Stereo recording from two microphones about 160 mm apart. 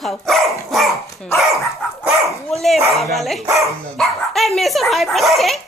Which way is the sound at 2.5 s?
Centre (ahead or behind).